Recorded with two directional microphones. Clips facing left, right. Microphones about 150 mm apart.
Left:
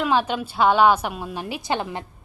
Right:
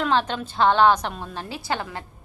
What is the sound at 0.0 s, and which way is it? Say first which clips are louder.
A woman's voice: left 1 dB; 10° left (ahead or behind).